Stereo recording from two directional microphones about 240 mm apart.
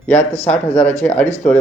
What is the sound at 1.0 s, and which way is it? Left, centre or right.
Speech, centre.